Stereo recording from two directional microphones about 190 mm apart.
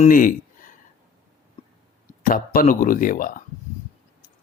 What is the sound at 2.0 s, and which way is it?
Speech, 45° left (ahead or behind).